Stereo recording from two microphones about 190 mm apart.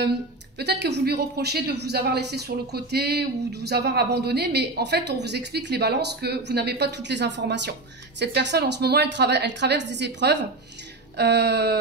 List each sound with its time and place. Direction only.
0.6 s speech: 60° right (ahead or behind)